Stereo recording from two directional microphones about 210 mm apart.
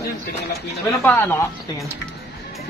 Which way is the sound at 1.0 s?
10° left (ahead or behind).